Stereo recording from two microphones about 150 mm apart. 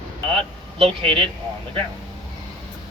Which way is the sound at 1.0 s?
35° right (ahead or behind).